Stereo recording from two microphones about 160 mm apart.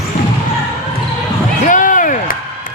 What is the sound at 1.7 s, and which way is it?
Basketball bounce, 55° left (ahead or behind).